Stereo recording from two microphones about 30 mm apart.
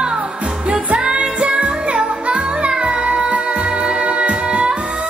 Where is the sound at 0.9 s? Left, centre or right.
Right.